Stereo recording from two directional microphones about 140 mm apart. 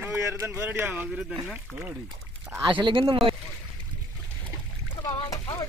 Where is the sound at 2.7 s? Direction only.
35° right (ahead or behind).